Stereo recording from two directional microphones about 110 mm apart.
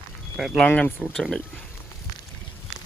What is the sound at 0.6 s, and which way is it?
Speech, 15° left (ahead or behind).